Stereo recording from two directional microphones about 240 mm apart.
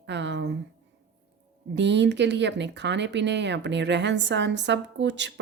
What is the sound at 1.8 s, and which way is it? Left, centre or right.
Speech, right.